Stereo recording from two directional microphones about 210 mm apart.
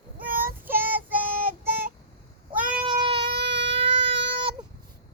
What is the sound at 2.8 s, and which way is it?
Child singing, 25° right (ahead or behind).